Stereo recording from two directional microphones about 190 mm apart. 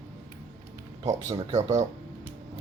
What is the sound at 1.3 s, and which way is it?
Speech, 35° right (ahead or behind).